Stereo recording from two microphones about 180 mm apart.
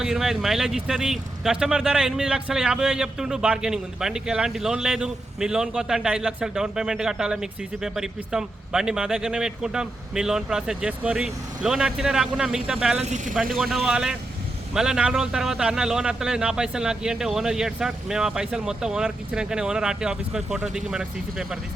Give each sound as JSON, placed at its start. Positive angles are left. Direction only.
{"t": 0.0, "sound": "speech", "side_deg": 0}
{"t": 13.1, "sound": "speech", "side_deg": -45}
{"t": 13.6, "sound": "speech", "side_deg": 0}